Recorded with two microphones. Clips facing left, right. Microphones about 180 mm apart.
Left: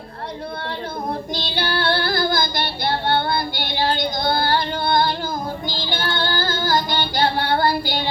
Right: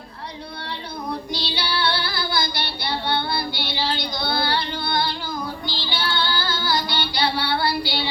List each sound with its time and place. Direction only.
1.3 s female singing: 50° left (ahead or behind)
5.6 s child singing: 45° left (ahead or behind)